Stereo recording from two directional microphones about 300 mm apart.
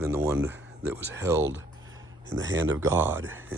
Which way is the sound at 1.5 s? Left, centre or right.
Right.